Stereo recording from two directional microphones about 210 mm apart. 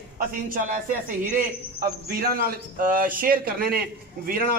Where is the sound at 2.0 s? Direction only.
45° right (ahead or behind).